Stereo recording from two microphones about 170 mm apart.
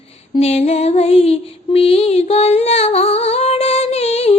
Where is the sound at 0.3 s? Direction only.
40° left (ahead or behind).